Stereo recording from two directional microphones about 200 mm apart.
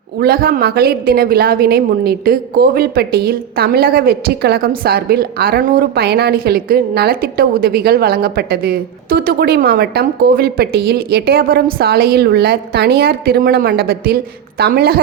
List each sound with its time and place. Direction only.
0.2 s a woman's voice: 45° right (ahead or behind)